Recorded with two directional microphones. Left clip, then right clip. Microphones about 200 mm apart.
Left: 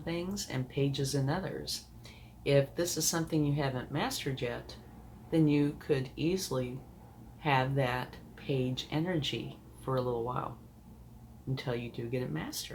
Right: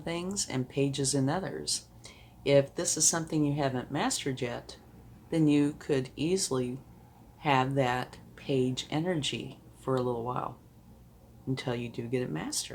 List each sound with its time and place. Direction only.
0.0 s speech: 50° right (ahead or behind)
11.5 s speech: 45° right (ahead or behind)